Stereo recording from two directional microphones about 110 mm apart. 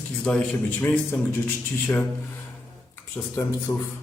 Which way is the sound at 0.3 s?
15° left (ahead or behind).